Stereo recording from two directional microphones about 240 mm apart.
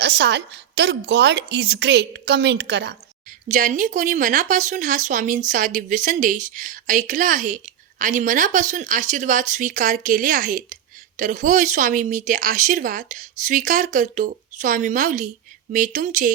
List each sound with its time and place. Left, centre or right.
0.0 s a woman's voice: right
3.5 s a woman's voice: right